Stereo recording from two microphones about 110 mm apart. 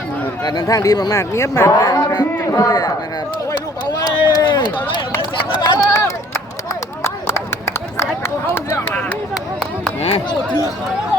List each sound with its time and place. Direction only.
0.4 s a man's voice: 35° left (ahead or behind)
4.2 s speech: 40° left (ahead or behind)
5.5 s run: 35° left (ahead or behind); by 9.1 s 15° left (ahead or behind)